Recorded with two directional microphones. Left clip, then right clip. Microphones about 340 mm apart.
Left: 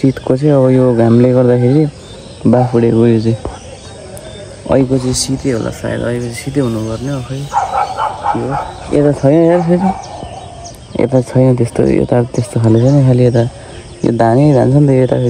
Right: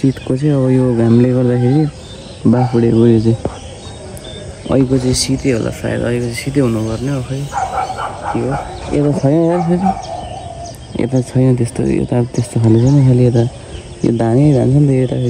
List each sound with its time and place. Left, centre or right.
0.1 s speech: centre
5.0 s speech: centre
9.2 s speech: left
11.0 s speech: centre
12.6 s speech: centre